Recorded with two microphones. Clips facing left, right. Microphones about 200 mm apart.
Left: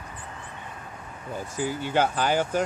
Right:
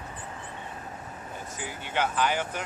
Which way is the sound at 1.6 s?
35° left (ahead or behind).